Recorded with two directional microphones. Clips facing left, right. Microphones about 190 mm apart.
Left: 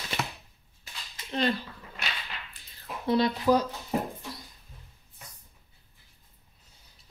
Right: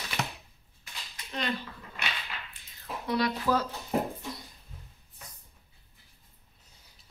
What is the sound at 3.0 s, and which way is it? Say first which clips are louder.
Speech: left 4 dB; 25° left (ahead or behind).